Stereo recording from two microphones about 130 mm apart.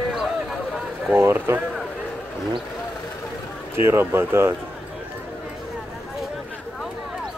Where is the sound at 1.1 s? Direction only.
20° right (ahead or behind).